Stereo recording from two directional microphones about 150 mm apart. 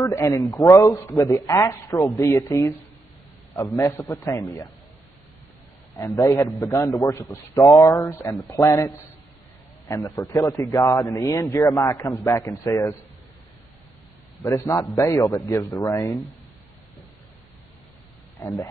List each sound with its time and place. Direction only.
0.0 s a man's voice: 20° left (ahead or behind)
4.1 s a man's voice: 20° left (ahead or behind)
5.9 s a man's voice: 25° left (ahead or behind)
14.4 s a man's voice: 20° left (ahead or behind)
18.4 s a man's voice: 20° left (ahead or behind)